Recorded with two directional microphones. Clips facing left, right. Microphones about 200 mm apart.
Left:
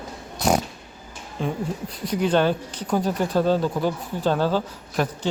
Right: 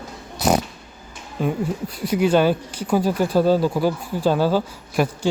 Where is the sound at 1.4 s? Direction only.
5° right (ahead or behind).